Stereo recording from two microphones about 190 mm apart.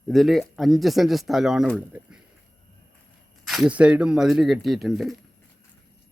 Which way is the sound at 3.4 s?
5° right (ahead or behind).